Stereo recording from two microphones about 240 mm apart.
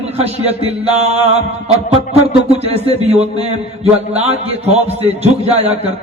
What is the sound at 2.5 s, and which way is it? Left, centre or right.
A man's voice, right.